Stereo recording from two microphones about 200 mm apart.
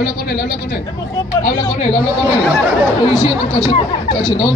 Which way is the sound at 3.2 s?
25° left (ahead or behind).